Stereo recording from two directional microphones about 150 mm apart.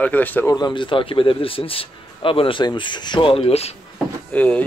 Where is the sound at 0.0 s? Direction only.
10° left (ahead or behind).